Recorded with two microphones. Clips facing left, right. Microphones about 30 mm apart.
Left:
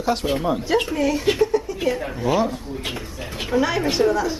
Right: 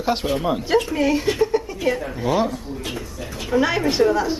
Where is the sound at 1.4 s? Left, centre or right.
Right.